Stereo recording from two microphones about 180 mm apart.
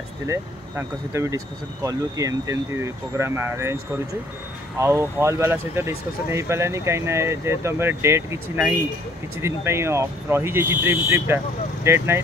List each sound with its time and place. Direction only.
0.3 s speech: 15° right (ahead or behind)
4.7 s speech: 15° right (ahead or behind)